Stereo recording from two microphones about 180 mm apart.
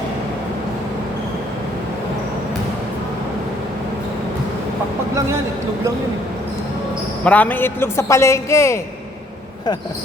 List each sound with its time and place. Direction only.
7.3 s a man's voice: 10° left (ahead or behind)